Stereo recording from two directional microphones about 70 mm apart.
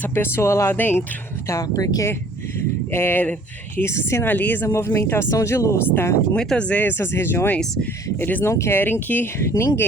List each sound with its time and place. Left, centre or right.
0.0 s speech: left
0.8 s speech: left
1.6 s speech: left
2.9 s speech: left
3.8 s speech: left
4.3 s speech: left
4.7 s speech: left
6.3 s speech: centre
6.8 s speech: left
8.4 s speech: left
9.4 s speech: left